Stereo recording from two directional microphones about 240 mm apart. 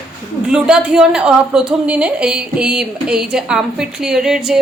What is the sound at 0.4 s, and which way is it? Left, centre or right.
A woman's voice, centre.